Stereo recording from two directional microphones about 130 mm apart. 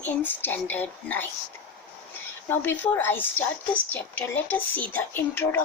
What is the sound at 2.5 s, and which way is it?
A woman's voice, 15° left (ahead or behind).